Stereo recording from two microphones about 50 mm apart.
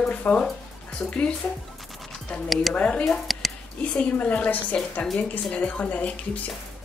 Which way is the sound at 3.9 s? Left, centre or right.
Left.